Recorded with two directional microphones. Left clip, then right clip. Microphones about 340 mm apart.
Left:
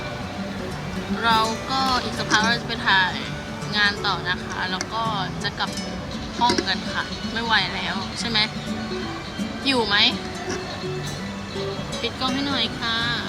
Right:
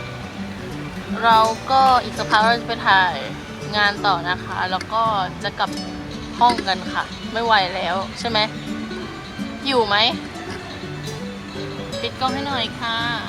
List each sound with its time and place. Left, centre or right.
1.2 s speech: centre
9.6 s speech: centre
12.2 s speech: centre